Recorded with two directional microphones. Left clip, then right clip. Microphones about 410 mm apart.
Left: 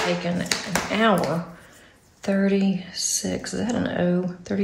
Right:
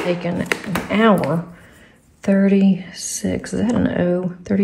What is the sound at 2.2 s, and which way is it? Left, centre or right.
Speech, centre.